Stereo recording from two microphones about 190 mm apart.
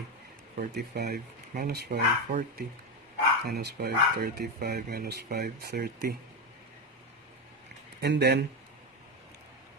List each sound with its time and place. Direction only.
0.7 s speech: 60° right (ahead or behind)
8.0 s speech: 60° right (ahead or behind)